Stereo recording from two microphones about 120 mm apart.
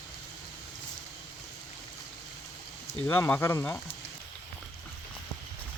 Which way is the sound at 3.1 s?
15° left (ahead or behind).